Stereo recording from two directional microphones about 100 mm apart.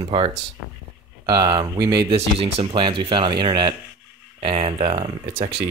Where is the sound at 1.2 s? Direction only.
40° right (ahead or behind).